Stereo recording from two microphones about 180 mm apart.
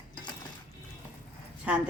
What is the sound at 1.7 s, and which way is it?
Speech, 5° right (ahead or behind).